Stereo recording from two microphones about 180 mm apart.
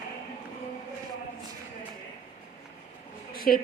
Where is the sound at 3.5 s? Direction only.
50° left (ahead or behind).